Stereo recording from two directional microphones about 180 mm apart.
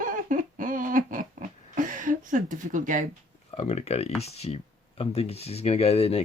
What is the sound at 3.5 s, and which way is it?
Speech, 35° left (ahead or behind).